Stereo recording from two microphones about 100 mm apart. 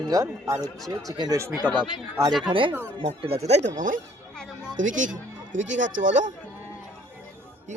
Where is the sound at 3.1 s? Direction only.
85° right.